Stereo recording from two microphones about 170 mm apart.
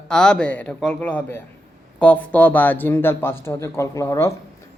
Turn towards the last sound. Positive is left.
turn(degrees=15)  # may be behind; listen again after turning